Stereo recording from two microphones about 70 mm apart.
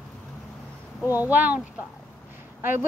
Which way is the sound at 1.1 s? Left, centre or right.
Right.